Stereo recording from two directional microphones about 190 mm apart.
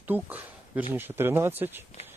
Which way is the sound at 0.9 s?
10° right (ahead or behind).